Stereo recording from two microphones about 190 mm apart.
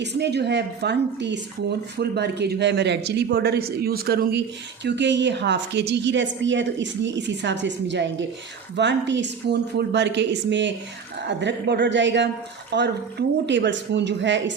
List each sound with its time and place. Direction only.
0.0 s a man's voice: 65° right (ahead or behind)